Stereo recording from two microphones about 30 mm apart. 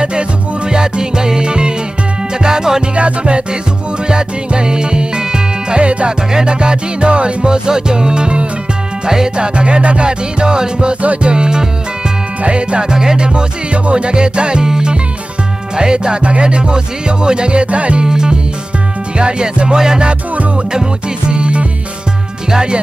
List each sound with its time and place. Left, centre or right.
0.7 s music: right
3.0 s music: right
4.1 s music: right
9.0 s music: centre
9.4 s music: right
11.0 s music: right
11.3 s music: right
12.4 s music: right
12.9 s music: right
13.8 s music: right
18.0 s music: right
21.3 s music: right
22.5 s music: right